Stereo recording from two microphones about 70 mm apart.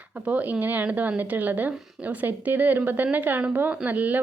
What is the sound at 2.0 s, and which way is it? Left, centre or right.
Speech, right.